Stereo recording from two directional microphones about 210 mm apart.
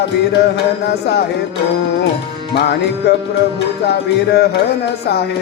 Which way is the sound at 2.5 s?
50° left (ahead or behind).